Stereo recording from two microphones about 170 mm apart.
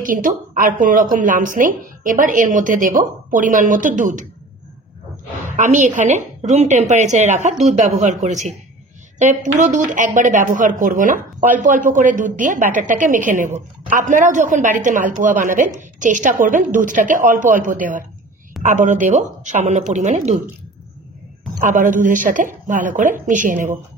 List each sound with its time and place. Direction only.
0.0 s speech: 55° right (ahead or behind)
5.5 s speech: 45° right (ahead or behind)
21.5 s speech: 50° right (ahead or behind)